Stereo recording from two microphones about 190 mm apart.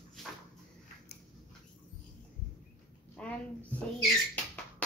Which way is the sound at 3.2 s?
5° left (ahead or behind).